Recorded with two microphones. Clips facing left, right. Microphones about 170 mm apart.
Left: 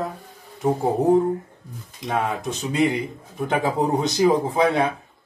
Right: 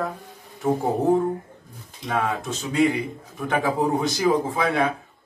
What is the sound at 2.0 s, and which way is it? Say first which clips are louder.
A man's voice: left 1 dB; 20° left (ahead or behind).